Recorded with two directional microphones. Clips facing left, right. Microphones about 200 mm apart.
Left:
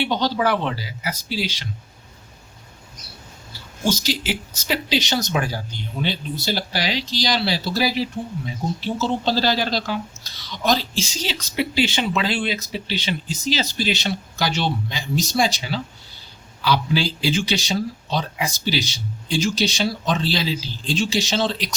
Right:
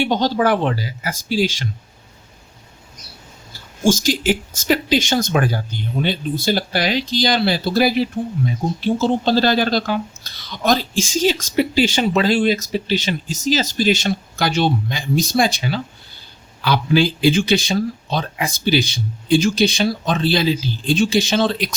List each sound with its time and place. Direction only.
0.0 s speech: 45° right (ahead or behind)
3.5 s speech: 50° right (ahead or behind)